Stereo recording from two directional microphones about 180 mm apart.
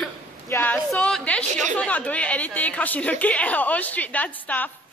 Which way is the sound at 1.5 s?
45° right (ahead or behind).